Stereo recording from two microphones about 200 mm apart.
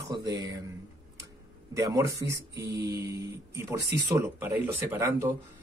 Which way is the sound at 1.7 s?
15° right (ahead or behind).